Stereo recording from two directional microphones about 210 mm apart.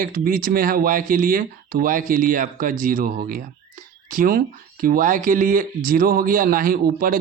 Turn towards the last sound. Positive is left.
turn(degrees=-45)  # may be behind; listen again after turning